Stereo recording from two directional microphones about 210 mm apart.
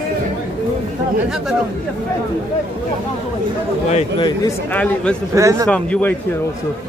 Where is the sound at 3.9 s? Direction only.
25° left (ahead or behind).